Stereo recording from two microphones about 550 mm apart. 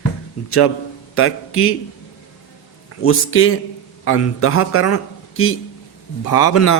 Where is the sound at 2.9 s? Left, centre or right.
Left.